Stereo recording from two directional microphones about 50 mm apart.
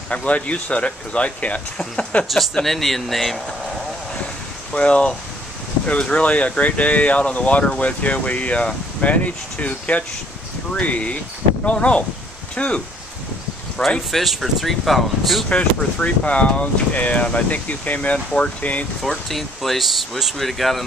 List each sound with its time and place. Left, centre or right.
0.1 s speech: left
2.2 s speech: centre
4.7 s speech: left
13.8 s speech: centre
14.1 s speech: centre
15.5 s speech: left
19.0 s speech: centre